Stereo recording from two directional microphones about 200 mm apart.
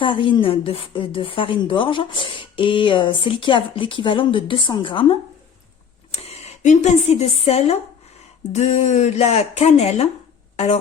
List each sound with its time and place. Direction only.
0.0 s a woman's voice: 25° left (ahead or behind)